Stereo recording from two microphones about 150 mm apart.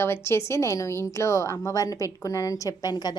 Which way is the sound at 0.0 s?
15° left (ahead or behind).